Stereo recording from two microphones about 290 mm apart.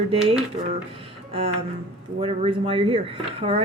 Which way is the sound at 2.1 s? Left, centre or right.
Centre.